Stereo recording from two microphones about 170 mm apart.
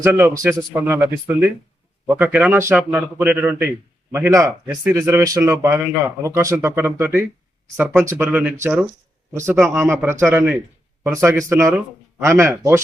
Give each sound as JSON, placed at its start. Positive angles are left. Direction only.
{"t": 0.0, "sound": "speech", "side_deg": -10}